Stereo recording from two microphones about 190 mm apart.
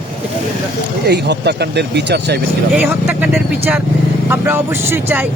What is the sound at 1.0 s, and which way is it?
Speech, 65° right (ahead or behind).